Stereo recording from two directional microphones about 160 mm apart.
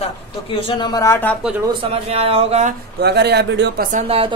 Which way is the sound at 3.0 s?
90° right.